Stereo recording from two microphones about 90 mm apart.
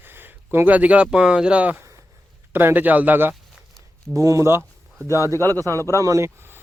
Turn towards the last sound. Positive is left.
turn(degrees=-30)  # may be behind; listen again after turning